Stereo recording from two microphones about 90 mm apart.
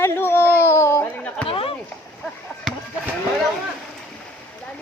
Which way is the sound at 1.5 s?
90° left.